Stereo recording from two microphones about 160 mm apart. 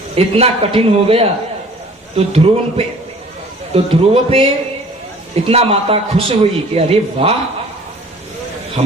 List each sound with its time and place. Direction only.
0.2 s a man's voice: 40° right (ahead or behind)